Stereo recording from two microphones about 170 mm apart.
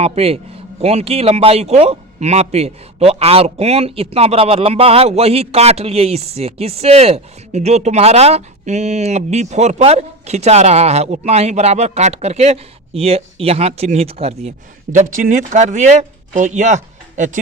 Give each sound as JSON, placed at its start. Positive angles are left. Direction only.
{"t": 0.0, "sound": "a man's voice", "side_deg": -35}
{"t": 14.9, "sound": "speech", "side_deg": -50}